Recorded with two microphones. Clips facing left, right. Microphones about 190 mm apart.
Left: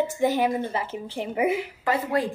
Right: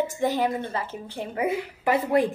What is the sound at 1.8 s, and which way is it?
Speech, 15° right (ahead or behind).